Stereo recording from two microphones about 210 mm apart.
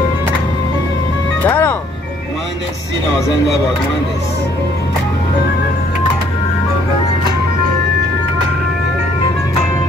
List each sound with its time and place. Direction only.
1.4 s music: 10° left (ahead or behind)